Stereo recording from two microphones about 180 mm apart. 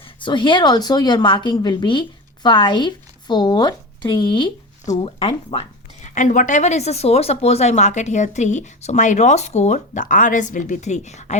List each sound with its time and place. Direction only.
0.2 s a woman's voice: 25° left (ahead or behind)